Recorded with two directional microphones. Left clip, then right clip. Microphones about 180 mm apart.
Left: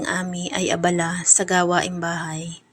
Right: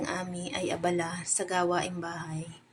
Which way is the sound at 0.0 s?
30° left (ahead or behind).